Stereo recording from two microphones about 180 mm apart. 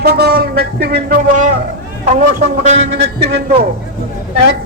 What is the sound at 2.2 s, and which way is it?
A man's voice, 40° right (ahead or behind).